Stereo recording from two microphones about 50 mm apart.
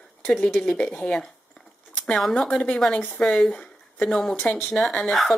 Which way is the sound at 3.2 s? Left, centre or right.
Left.